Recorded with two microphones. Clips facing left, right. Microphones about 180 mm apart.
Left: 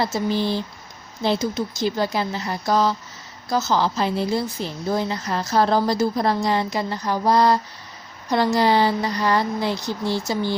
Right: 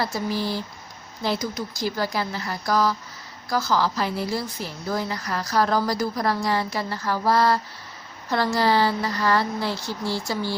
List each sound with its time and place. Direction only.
0.0 s a woman's voice: 25° left (ahead or behind)